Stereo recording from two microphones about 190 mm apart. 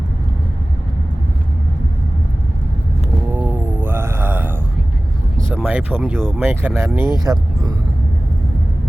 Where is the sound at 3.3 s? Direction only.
10° right (ahead or behind).